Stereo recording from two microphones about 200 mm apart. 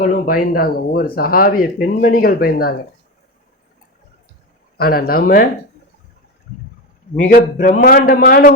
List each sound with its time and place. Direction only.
0.0 s speech: 45° left (ahead or behind)
4.8 s speech: 50° left (ahead or behind)
7.3 s speech: 40° left (ahead or behind)